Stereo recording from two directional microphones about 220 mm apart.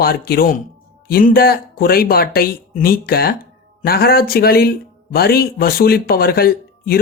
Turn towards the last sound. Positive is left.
turn(degrees=45)  # may be behind; listen again after turning